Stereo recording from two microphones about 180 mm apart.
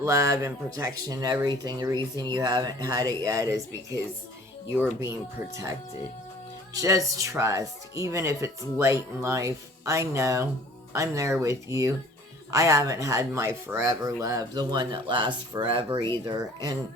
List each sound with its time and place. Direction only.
0.0 s speech: 15° right (ahead or behind)
4.7 s speech: 15° right (ahead or behind)
6.7 s speech: 20° right (ahead or behind)